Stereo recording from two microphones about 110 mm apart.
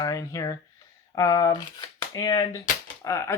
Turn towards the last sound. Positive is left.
turn(degrees=25)  # may be behind; listen again after turning